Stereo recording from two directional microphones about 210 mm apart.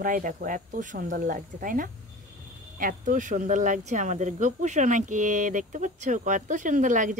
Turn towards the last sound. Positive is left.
turn(degrees=-35)  # may be behind; listen again after turning